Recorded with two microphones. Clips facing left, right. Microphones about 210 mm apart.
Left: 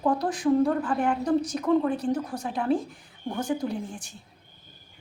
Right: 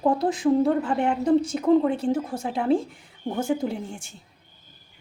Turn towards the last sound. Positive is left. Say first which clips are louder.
# right 2 dB
turn(degrees=-25)  # may be behind; listen again after turning